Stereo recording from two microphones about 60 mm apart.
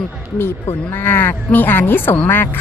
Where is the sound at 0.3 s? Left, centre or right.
Left.